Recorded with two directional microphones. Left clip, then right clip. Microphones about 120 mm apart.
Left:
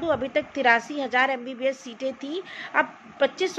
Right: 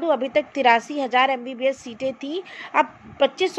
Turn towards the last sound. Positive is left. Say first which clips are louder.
# right 3 dB
turn(degrees=-40)  # may be behind; listen again after turning